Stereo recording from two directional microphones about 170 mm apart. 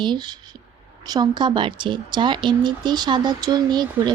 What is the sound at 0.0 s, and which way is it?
Speech, 25° right (ahead or behind).